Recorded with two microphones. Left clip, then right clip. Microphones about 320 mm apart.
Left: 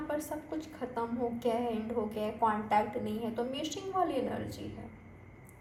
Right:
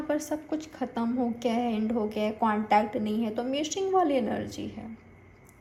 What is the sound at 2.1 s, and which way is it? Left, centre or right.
Speech, right.